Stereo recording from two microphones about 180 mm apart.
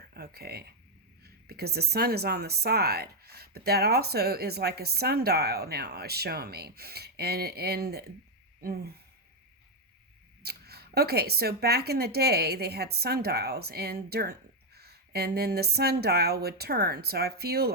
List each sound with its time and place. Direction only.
0.1 s speech: 60° right (ahead or behind)
10.4 s speech: 60° right (ahead or behind)